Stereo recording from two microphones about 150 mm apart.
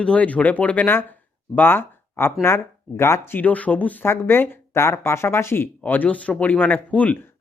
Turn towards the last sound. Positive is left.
turn(degrees=10)  # may be behind; listen again after turning